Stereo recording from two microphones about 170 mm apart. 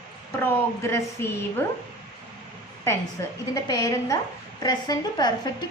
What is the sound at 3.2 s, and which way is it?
A woman's voice, 15° left (ahead or behind).